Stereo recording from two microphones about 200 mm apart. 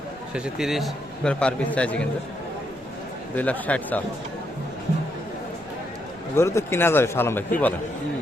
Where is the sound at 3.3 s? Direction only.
5° left (ahead or behind).